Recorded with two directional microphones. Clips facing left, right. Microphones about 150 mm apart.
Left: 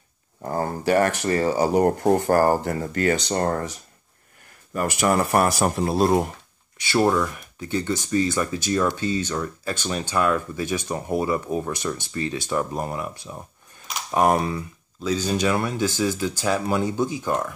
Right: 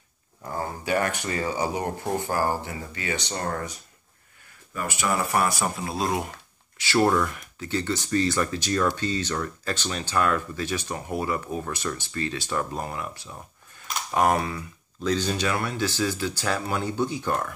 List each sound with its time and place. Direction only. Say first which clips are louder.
0.4 s speech: left 6 dB; 45° left (ahead or behind)
4.7 s speech: left 6 dB; 50° left (ahead or behind)
6.9 s speech: left 1 dB; 10° left (ahead or behind)